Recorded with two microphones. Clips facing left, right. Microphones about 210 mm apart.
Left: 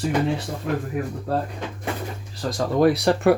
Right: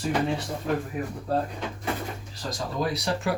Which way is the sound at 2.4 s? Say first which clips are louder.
Left 10 dB; 60° left (ahead or behind).